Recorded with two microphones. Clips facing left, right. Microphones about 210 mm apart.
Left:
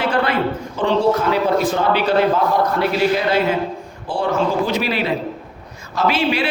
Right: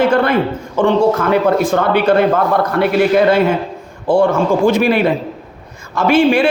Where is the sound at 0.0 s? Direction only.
45° right (ahead or behind).